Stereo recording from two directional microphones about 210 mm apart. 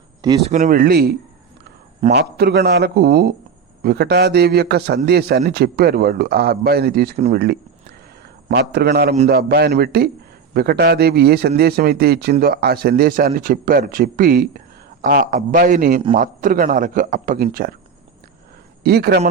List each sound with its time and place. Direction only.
0.4 s a man's voice: 35° right (ahead or behind)
2.1 s a man's voice: 50° right (ahead or behind)
7.3 s a sound: 50° right (ahead or behind)
8.4 s a man's voice: 50° right (ahead or behind)
18.8 s speech: 50° right (ahead or behind)